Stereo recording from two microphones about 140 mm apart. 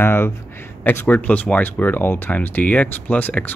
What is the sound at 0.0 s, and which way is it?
Speech, 15° left (ahead or behind).